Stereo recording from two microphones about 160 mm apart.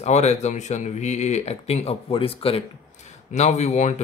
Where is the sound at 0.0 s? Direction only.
45° left (ahead or behind).